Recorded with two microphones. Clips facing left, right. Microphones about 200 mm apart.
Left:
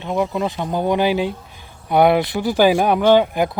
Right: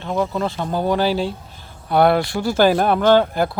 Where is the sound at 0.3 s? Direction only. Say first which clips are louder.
Left 1 dB; 15° left (ahead or behind).